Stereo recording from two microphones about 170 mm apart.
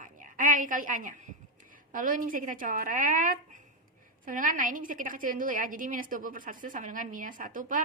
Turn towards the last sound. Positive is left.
turn(degrees=-50)  # may be behind; listen again after turning